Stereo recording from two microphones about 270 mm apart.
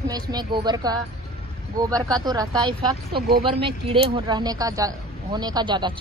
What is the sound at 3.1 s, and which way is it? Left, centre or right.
Speech, right.